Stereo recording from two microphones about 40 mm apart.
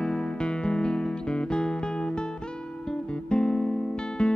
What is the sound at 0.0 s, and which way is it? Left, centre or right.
Music, centre.